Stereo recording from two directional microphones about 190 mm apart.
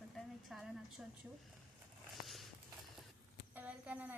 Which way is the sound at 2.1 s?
Centre (ahead or behind).